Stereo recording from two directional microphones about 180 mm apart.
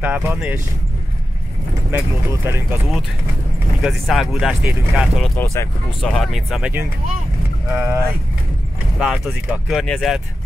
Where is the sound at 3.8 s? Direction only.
Centre (ahead or behind).